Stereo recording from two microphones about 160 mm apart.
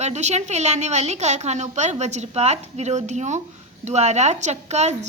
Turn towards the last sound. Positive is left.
turn(degrees=-45)  # may be behind; listen again after turning